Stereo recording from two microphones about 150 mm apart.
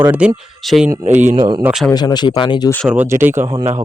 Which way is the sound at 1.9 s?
30° left (ahead or behind).